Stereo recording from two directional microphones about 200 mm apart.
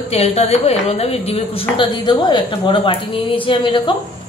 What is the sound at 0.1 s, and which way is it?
A woman's voice, 30° left (ahead or behind).